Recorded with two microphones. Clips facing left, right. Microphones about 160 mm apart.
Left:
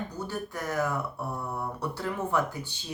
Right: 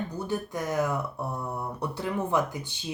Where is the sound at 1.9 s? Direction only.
15° right (ahead or behind).